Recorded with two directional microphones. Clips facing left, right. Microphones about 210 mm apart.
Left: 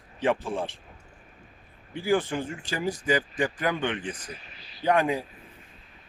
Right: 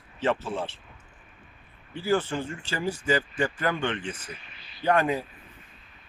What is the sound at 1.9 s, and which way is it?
Speech, 10° left (ahead or behind).